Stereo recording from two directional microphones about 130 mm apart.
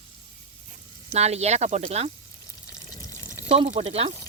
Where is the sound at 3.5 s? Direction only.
50° right (ahead or behind).